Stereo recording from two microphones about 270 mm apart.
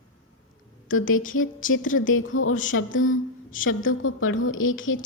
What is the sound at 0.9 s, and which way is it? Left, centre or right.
A woman's voice, left.